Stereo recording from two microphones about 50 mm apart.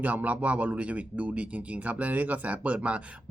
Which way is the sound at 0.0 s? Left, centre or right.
Right.